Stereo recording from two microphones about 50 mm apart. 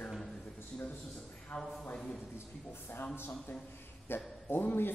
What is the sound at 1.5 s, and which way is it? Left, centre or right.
Speech, left.